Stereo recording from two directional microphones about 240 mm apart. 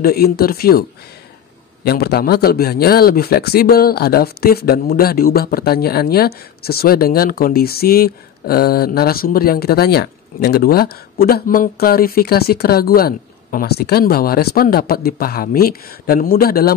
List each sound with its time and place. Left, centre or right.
0.0 s speech: left
1.9 s speech: left